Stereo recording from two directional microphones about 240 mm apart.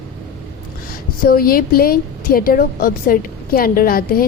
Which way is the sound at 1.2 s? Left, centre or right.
Left.